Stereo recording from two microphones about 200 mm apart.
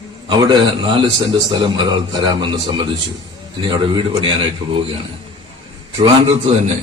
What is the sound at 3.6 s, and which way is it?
Speech, 25° right (ahead or behind).